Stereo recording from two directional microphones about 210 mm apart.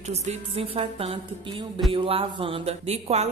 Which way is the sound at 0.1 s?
30° right (ahead or behind).